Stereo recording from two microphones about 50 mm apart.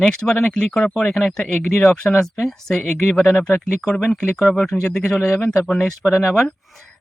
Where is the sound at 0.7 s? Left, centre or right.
Left.